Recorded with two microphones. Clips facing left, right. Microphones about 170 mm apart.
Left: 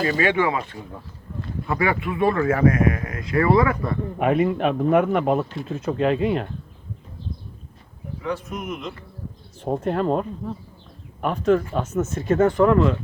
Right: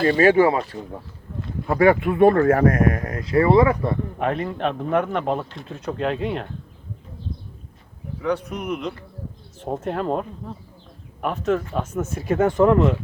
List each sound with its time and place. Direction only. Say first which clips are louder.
0.2 s speech: right 8 dB; 40° right (ahead or behind)
1.6 s speech: right 7 dB; 40° right (ahead or behind); by 3.9 s 25° right (ahead or behind)
4.2 s speech: left 6 dB; 10° left (ahead or behind)
8.2 s speech: right 4 dB; 65° right (ahead or behind)
9.6 s speech: left 3 dB; centre (ahead or behind); by 13.0 s 20° right (ahead or behind)